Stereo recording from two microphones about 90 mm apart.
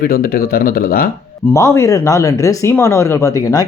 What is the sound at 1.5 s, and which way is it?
Speech, 35° left (ahead or behind).